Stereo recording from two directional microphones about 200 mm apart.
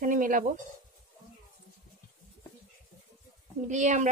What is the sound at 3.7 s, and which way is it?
Speech, 35° right (ahead or behind).